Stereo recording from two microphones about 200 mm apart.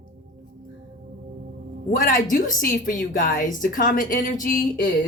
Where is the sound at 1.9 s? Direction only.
40° left (ahead or behind).